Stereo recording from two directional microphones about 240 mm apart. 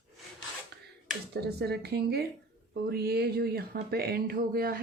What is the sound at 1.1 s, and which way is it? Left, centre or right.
Speech, right.